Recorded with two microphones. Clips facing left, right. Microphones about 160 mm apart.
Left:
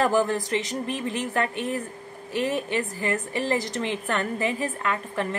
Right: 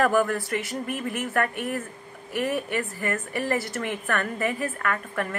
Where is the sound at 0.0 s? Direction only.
20° left (ahead or behind).